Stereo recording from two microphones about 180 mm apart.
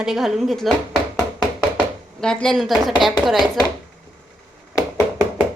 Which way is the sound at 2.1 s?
5° left (ahead or behind).